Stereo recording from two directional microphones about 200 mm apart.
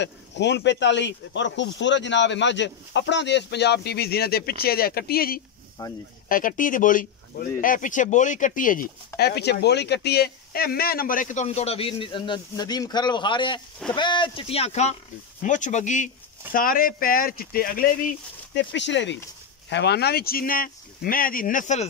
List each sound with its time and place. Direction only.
0.0 s speech: 60° left (ahead or behind)
5.8 s speech: 20° left (ahead or behind)
6.2 s speech: 45° left (ahead or behind)
18.5 s speech: 60° left (ahead or behind); by 21.8 s 40° left (ahead or behind)